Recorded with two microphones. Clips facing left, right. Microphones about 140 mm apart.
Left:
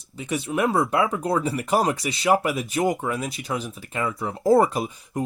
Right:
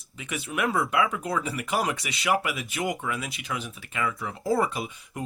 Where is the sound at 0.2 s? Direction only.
35° left (ahead or behind).